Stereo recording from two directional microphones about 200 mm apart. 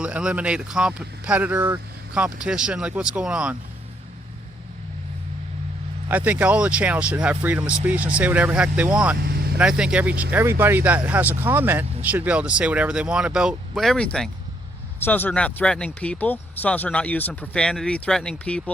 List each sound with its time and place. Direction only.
0.0 s speech: 5° right (ahead or behind)
6.1 s speech: 5° right (ahead or behind)
9.2 s vehicle: 50° right (ahead or behind)
9.6 s speech: 5° right (ahead or behind)